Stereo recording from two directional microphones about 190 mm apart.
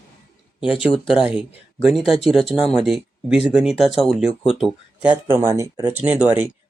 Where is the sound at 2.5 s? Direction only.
Centre (ahead or behind).